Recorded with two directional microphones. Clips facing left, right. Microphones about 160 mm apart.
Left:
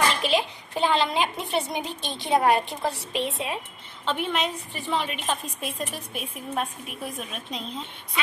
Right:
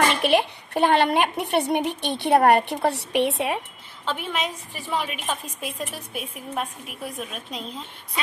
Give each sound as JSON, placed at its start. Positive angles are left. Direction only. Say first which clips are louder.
{"t": 0.1, "sound": "a child's voice", "louder": "right 4 dB", "side_deg": -60}
{"t": 4.0, "sound": "a woman's voice", "louder": "left 1 dB", "side_deg": -5}